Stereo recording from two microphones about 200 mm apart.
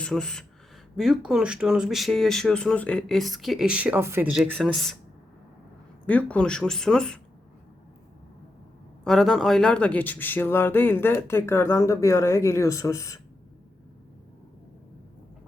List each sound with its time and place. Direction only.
0.0 s speech: 5° left (ahead or behind)
4.4 s speech: centre (ahead or behind)
6.1 s speech: 5° left (ahead or behind)
9.0 s speech: centre (ahead or behind)